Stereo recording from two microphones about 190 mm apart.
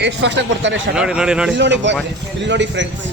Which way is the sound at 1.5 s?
70° right (ahead or behind).